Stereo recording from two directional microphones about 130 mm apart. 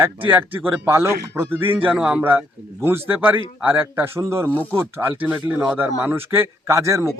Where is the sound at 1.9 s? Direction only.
10° right (ahead or behind).